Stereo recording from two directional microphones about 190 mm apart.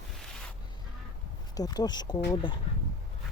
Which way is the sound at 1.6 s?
20° left (ahead or behind).